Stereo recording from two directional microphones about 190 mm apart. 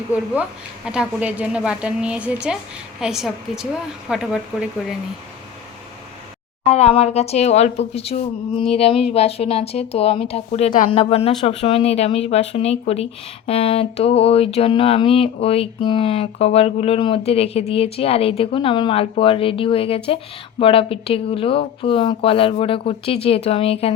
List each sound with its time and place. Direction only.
0.9 s a woman's voice: 5° right (ahead or behind)
6.7 s speech: 35° left (ahead or behind)